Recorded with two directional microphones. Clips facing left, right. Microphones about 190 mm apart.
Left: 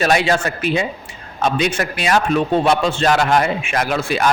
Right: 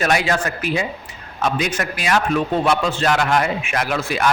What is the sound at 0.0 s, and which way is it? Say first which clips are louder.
A man's voice: left 3 dB; 25° left (ahead or behind).